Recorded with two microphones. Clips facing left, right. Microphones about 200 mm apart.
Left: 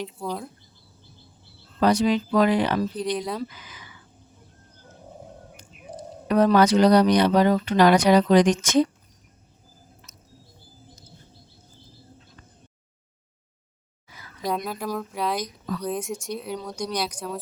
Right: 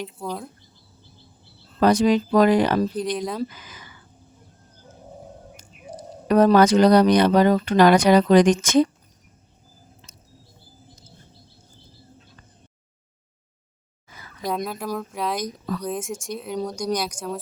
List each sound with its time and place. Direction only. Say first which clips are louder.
0.0 s speech: even; centre (ahead or behind)
1.8 s speech: right 3 dB; 50° right (ahead or behind)
2.9 s speech: right 1 dB; centre (ahead or behind)
3.5 s speech: right 2 dB; 45° right (ahead or behind)
6.2 s speech: right 3 dB; 45° right (ahead or behind)
10.1 s a sound: right 1 dB; 30° right (ahead or behind)
14.4 s speech: right 1 dB; centre (ahead or behind)